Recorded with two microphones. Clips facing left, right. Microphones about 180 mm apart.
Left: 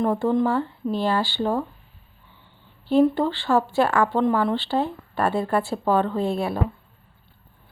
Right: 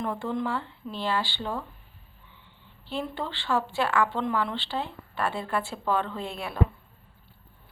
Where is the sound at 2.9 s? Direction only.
40° left (ahead or behind).